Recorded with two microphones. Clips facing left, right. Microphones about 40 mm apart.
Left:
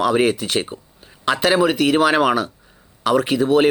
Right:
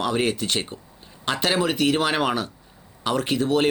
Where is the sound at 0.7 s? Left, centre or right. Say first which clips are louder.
Left 4 dB; centre.